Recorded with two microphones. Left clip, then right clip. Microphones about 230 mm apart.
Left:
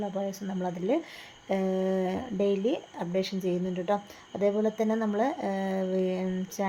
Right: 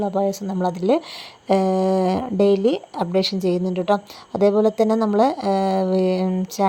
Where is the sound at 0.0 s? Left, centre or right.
Right.